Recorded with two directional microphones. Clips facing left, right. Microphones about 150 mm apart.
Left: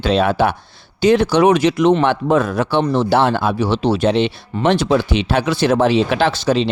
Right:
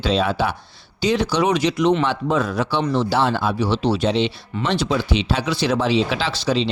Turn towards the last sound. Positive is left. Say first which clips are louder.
# left 5 dB
turn(degrees=50)  # may be behind; listen again after turning